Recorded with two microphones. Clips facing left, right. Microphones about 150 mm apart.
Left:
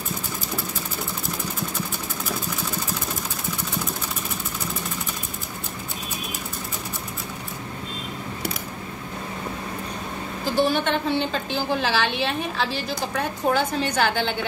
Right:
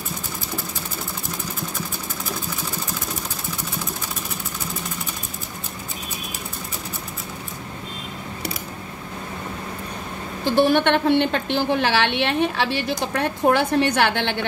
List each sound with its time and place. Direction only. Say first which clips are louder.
10.7 s a woman's voice: right 5 dB; 65° right (ahead or behind)